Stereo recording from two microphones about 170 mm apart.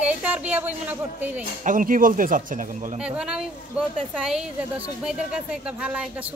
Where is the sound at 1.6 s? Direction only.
50° right (ahead or behind).